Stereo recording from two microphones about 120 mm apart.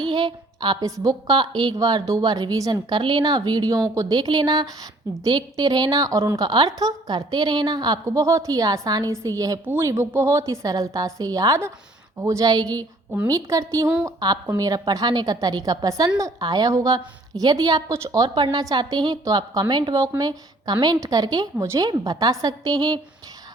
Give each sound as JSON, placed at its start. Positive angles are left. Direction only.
{"t": 0.0, "sound": "a woman's voice", "side_deg": -40}
{"t": 3.0, "sound": "a woman's voice", "side_deg": -40}